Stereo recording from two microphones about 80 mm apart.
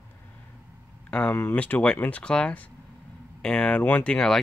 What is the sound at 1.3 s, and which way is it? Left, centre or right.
Speech, left.